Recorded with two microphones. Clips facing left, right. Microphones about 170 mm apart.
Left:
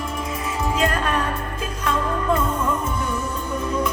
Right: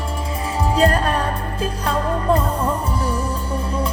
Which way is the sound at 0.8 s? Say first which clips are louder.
Right 5 dB; 35° right (ahead or behind).